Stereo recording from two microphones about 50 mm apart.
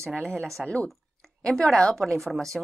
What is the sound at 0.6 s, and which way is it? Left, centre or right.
Speech, left.